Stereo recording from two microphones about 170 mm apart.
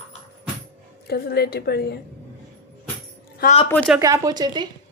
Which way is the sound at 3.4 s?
60° left (ahead or behind).